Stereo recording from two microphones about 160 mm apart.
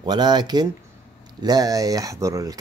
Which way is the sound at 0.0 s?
25° right (ahead or behind).